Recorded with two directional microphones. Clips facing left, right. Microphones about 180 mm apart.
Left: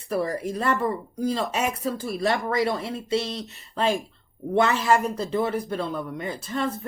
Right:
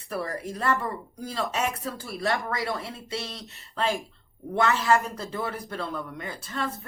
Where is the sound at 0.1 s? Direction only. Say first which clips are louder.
Left 6 dB; 20° left (ahead or behind).